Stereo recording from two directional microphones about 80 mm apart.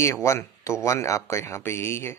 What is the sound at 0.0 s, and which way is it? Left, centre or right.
Speech, left.